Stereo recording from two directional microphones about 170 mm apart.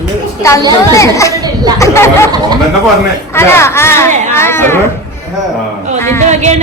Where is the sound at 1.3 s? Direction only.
25° right (ahead or behind).